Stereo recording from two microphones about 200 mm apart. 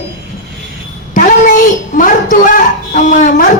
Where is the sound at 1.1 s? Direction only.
40° left (ahead or behind).